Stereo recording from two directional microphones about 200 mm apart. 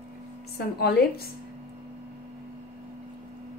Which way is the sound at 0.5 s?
50° left (ahead or behind).